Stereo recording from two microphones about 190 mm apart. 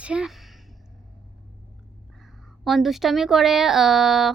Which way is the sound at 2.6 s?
Centre (ahead or behind).